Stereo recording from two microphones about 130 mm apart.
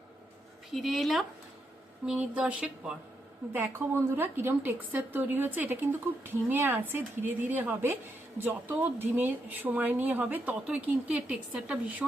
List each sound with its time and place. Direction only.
0.7 s a woman's voice: centre (ahead or behind)